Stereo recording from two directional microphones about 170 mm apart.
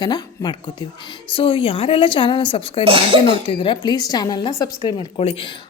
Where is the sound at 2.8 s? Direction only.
30° right (ahead or behind).